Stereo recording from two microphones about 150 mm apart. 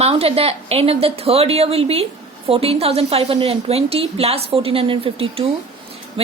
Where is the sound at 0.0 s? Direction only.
40° right (ahead or behind).